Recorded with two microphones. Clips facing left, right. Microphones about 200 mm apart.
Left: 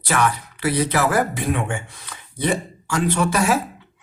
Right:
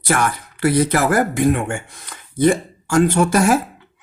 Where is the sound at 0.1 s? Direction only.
45° right (ahead or behind).